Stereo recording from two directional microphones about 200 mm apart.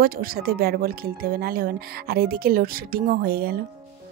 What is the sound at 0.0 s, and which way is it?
Speech, 45° right (ahead or behind).